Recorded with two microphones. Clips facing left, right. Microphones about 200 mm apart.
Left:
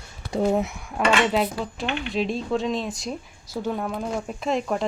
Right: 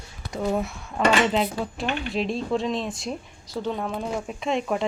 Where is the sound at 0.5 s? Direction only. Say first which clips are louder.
Left 2 dB; 20° left (ahead or behind).